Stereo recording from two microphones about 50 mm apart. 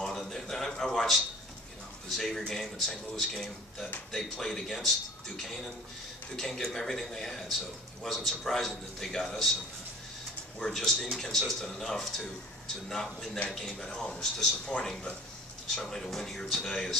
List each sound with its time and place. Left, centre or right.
0.0 s a sound: centre
2.0 s a man's voice: centre
10.6 s a man's voice: centre